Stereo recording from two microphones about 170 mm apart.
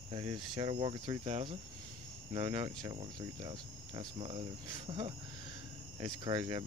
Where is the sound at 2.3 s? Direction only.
30° right (ahead or behind).